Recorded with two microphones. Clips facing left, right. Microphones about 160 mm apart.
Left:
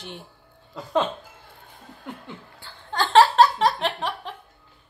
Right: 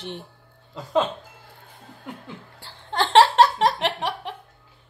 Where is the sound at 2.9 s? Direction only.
25° right (ahead or behind).